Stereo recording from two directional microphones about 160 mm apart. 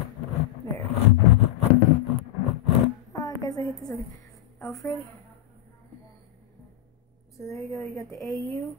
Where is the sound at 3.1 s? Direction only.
25° left (ahead or behind).